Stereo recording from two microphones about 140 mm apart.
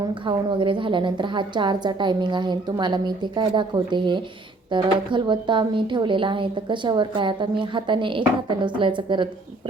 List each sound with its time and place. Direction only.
0.1 s a woman's voice: 35° right (ahead or behind)